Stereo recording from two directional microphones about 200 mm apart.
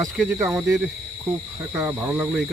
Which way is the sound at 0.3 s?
15° right (ahead or behind).